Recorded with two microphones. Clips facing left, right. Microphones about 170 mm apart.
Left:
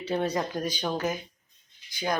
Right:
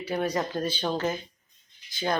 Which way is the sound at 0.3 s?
15° left (ahead or behind).